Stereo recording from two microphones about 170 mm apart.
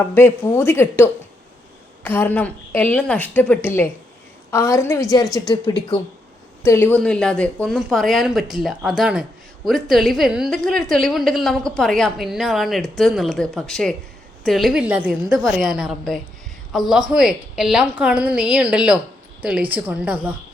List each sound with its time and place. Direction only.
0.1 s a woman's voice: 15° left (ahead or behind); by 20.1 s 10° right (ahead or behind)